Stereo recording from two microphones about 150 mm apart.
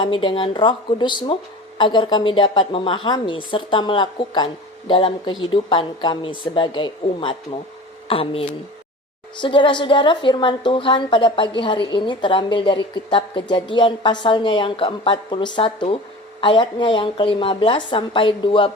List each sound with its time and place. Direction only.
0.0 s a woman's voice: 35° left (ahead or behind)